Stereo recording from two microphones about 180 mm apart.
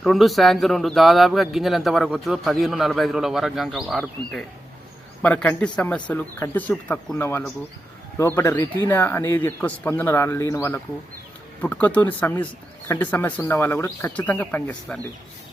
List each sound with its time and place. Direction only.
0.0 s a man's voice: centre (ahead or behind)